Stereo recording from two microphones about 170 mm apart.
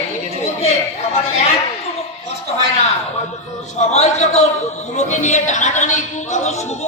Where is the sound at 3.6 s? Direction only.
40° left (ahead or behind).